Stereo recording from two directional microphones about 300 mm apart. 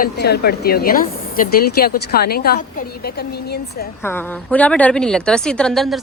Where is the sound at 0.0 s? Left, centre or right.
Left.